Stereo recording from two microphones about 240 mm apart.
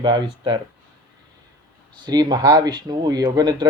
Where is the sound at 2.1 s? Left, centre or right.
Centre.